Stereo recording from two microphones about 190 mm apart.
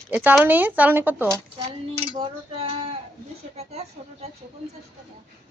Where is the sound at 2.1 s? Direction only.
30° right (ahead or behind).